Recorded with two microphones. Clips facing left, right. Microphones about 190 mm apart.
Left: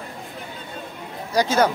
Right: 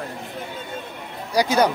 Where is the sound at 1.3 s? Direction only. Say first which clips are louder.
Even; 15° right (ahead or behind).